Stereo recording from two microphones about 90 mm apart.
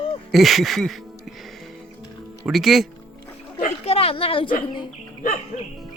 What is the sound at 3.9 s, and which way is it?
Speech, 90° left.